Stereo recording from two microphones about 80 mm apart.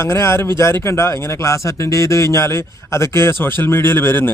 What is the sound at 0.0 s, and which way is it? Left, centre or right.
A man's voice, left.